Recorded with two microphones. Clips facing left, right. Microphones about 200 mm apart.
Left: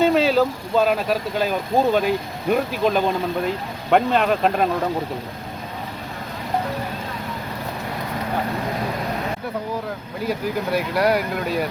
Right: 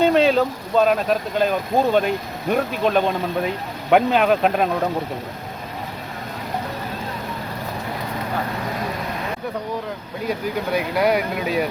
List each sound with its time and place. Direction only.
0.0 s speech: centre (ahead or behind)
10.2 s speech: centre (ahead or behind)